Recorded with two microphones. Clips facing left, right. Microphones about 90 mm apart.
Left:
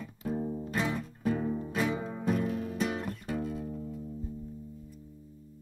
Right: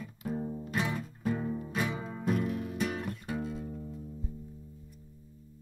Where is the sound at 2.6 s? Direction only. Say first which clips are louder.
Left 1 dB; 35° left (ahead or behind).